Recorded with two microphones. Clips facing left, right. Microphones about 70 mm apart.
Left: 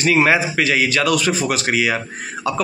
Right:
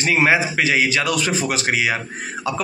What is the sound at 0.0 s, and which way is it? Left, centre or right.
Speech, centre.